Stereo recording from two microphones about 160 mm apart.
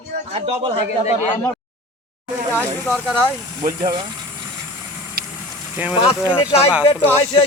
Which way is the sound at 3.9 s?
30° right (ahead or behind).